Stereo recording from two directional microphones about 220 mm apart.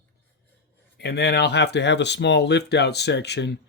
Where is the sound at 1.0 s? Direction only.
50° left (ahead or behind).